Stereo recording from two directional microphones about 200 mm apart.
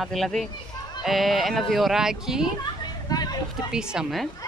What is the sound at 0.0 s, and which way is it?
Speech, centre (ahead or behind).